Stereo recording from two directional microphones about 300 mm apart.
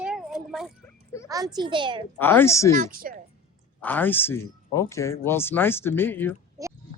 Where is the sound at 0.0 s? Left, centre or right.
Centre.